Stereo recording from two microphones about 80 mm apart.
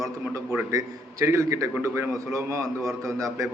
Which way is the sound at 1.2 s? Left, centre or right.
Right.